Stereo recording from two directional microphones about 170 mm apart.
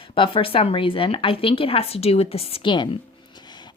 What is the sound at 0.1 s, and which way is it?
Speech, 30° left (ahead or behind).